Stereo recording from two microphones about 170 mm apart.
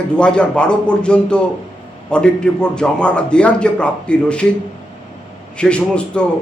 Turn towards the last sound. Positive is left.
turn(degrees=5)  # may be behind; listen again after turning